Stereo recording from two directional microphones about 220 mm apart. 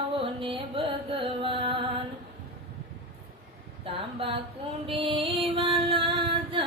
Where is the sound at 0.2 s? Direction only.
25° right (ahead or behind).